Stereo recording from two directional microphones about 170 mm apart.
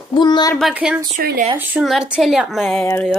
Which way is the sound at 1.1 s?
50° right (ahead or behind).